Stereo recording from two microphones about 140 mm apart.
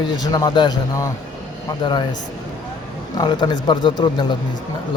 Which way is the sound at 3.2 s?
30° left (ahead or behind).